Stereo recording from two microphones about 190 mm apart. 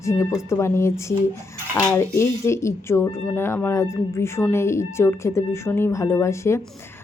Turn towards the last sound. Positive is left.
turn(degrees=15)  # may be behind; listen again after turning